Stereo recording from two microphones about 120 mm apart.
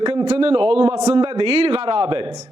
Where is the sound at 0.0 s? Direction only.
45° right (ahead or behind).